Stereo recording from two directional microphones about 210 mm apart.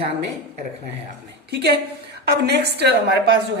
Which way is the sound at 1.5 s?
50° right (ahead or behind).